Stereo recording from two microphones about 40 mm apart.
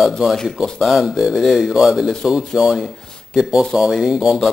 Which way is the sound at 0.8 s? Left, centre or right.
Centre.